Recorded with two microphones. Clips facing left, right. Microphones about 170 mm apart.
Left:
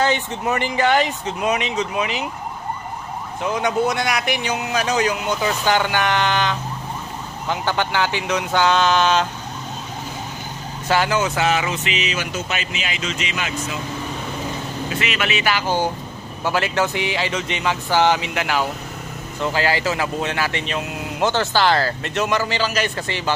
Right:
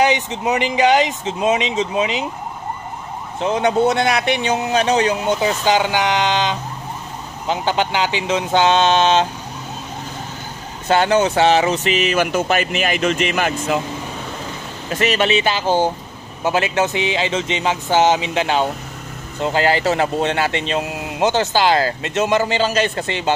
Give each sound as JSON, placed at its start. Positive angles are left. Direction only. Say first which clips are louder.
{"t": 0.0, "sound": "speech", "louder": "right 3 dB", "side_deg": -15}
{"t": 3.3, "sound": "speech", "louder": "right 4 dB", "side_deg": -25}
{"t": 10.9, "sound": "speech", "louder": "right 4 dB", "side_deg": -30}
{"t": 14.9, "sound": "speech", "louder": "right 8 dB", "side_deg": -40}